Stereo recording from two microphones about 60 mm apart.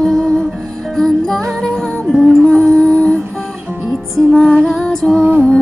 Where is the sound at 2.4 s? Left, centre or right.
Centre.